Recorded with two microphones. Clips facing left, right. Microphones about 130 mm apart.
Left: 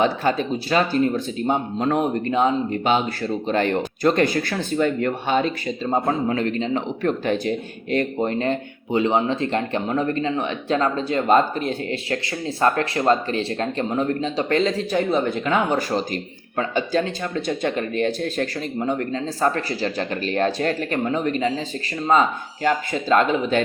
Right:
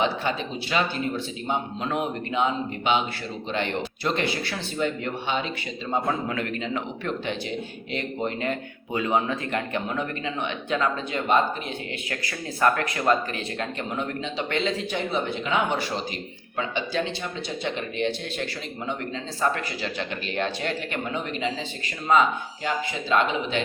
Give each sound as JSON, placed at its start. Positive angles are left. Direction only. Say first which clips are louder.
{"t": 0.0, "sound": "a man's voice", "louder": "left 5 dB", "side_deg": 45}
{"t": 5.9, "sound": "a man's voice", "louder": "left 4 dB", "side_deg": 35}
{"t": 12.1, "sound": "a man's voice", "louder": "left 7 dB", "side_deg": 30}